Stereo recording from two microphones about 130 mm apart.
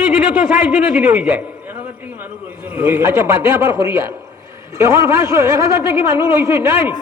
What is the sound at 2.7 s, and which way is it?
Speech, 15° right (ahead or behind).